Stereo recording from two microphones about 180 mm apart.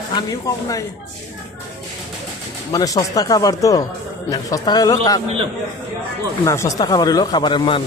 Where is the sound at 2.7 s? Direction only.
20° left (ahead or behind).